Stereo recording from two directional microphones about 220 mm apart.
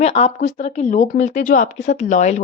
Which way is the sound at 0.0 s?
30° left (ahead or behind).